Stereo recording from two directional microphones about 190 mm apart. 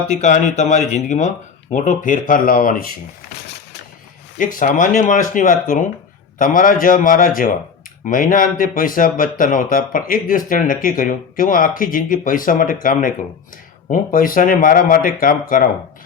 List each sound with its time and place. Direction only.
0.2 s speech: 40° left (ahead or behind)
4.4 s speech: 45° left (ahead or behind)